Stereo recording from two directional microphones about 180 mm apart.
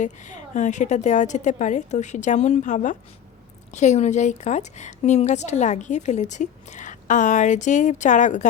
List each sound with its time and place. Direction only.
0.0 s a woman's voice: 45° left (ahead or behind)